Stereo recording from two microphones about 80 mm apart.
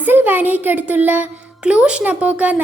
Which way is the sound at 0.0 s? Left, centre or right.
Right.